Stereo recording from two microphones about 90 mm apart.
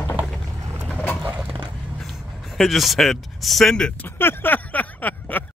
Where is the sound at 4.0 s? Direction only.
25° left (ahead or behind).